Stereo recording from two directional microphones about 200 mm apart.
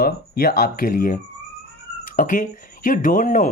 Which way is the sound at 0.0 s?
45° left (ahead or behind).